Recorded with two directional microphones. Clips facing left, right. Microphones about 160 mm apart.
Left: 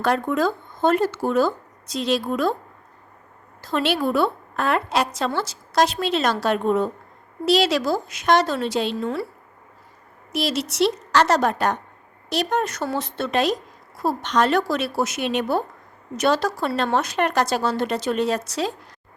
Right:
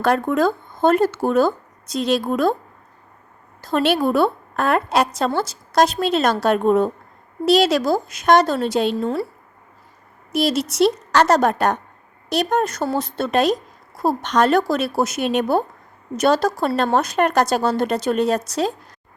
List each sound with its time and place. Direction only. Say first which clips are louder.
0.0 s a woman's voice: right 3 dB; 50° right (ahead or behind)
3.7 s a woman's voice: right 4 dB; 50° right (ahead or behind)
10.3 s a woman's voice: right 4 dB; 45° right (ahead or behind)